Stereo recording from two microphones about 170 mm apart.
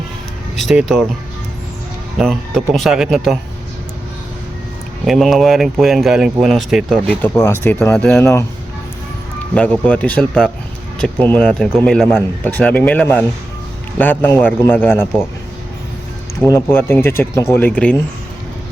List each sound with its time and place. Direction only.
0.5 s speech: centre (ahead or behind)
2.1 s speech: centre (ahead or behind)
5.0 s speech: centre (ahead or behind)
7.2 s a man's voice: 15° left (ahead or behind)
8.2 s a man's voice: 15° left (ahead or behind)
9.6 s a man's voice: 10° left (ahead or behind)
16.4 s a man's voice: 15° left (ahead or behind)